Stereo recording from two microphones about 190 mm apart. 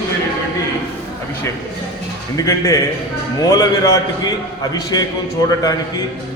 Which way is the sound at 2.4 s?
15° left (ahead or behind).